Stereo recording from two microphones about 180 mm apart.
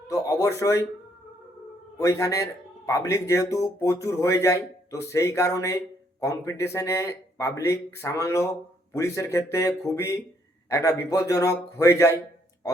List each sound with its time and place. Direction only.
0.1 s speech: 20° left (ahead or behind)
2.0 s speech: 15° left (ahead or behind)